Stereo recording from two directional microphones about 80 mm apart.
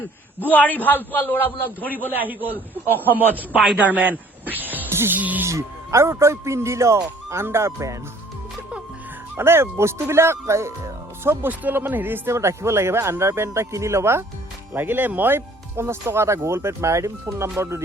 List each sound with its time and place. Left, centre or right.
0.3 s a man's voice: left
2.1 s a man's voice: right
2.5 s a man's voice: left
3.2 s a man's voice: centre
5.5 s speech: right
9.3 s speech: right